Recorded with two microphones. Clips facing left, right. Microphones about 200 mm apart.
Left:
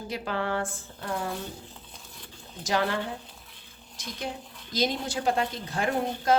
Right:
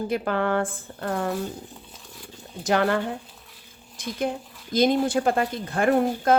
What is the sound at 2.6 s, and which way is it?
Speech, 55° right (ahead or behind).